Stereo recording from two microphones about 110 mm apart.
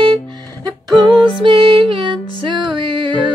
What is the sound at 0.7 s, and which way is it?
Music, 40° right (ahead or behind).